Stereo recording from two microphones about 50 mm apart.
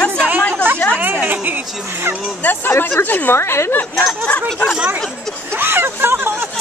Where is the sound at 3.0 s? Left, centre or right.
Left.